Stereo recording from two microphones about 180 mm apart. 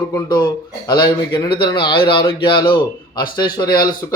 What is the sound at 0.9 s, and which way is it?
A man's voice, 25° left (ahead or behind).